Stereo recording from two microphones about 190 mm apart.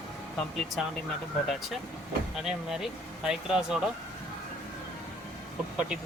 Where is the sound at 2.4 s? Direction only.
5° right (ahead or behind).